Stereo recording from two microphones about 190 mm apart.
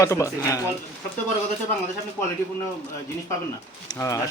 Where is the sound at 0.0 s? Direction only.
15° left (ahead or behind).